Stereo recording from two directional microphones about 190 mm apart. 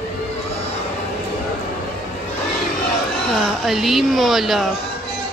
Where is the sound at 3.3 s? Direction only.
Centre (ahead or behind).